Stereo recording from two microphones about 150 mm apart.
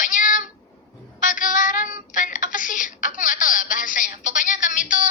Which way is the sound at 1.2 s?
60° left (ahead or behind).